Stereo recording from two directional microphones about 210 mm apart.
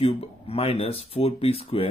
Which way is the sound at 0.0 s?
30° left (ahead or behind).